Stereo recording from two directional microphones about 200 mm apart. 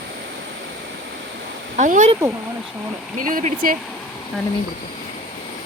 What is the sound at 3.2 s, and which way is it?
Speech, 45° right (ahead or behind).